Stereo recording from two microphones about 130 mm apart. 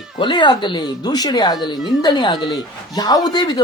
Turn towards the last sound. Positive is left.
turn(degrees=30)  # may be behind; listen again after turning